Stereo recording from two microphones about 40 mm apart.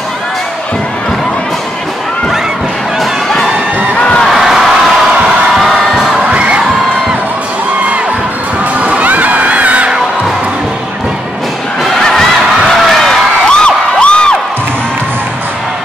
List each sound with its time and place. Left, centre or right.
4.3 s a sound: centre
5.5 s crowd: centre
6.2 s crowd: right
8.7 s crowd: right
12.0 s a sound: centre
13.5 s crowd: left